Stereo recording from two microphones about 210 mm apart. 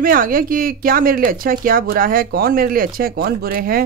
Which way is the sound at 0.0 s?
40° right (ahead or behind).